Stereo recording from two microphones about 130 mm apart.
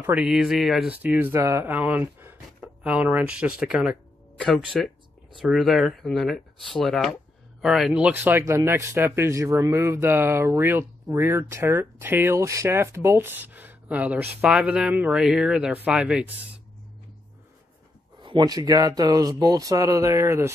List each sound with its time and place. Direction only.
0.2 s speech: 5° right (ahead or behind)
4.5 s speech: centre (ahead or behind)
18.2 s speech: 35° right (ahead or behind)